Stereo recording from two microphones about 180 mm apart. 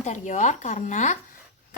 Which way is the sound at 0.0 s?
40° left (ahead or behind).